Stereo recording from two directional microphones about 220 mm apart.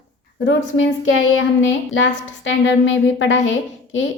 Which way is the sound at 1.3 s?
60° left (ahead or behind).